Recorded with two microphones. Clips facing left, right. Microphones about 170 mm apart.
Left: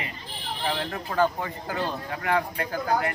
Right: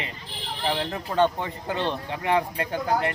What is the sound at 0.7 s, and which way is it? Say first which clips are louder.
Speech: right 3 dB; 25° right (ahead or behind).